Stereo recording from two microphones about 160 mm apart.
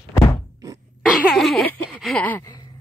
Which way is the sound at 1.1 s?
Centre (ahead or behind).